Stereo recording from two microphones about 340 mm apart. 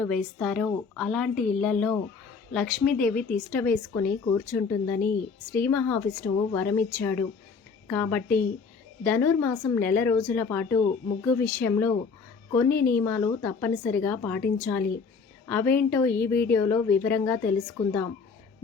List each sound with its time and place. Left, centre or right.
0.0 s speech: centre
4.9 s a woman's voice: left
5.6 s speech: centre